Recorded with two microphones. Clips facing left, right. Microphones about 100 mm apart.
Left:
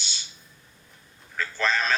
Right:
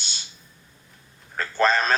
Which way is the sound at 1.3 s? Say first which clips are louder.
Right 5 dB; 45° right (ahead or behind).